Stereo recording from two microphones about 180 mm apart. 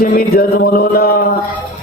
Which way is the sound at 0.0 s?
55° left (ahead or behind).